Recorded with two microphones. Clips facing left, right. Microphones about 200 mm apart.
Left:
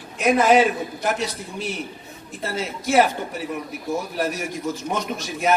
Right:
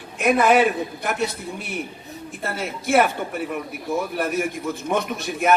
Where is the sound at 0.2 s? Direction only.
60° right (ahead or behind).